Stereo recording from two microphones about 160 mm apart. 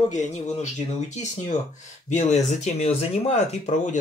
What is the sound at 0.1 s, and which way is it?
Speech, 50° left (ahead or behind).